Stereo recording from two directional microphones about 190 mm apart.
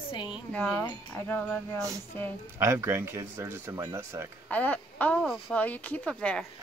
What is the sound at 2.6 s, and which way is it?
Speech, 15° right (ahead or behind).